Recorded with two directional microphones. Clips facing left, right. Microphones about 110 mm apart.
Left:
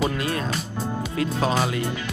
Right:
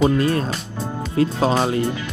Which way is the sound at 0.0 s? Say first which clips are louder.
Right 7 dB; 35° right (ahead or behind).